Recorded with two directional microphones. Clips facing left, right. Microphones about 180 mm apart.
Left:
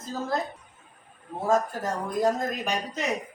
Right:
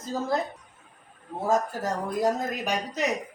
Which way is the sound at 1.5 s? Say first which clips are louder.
Left 1 dB; 10° right (ahead or behind).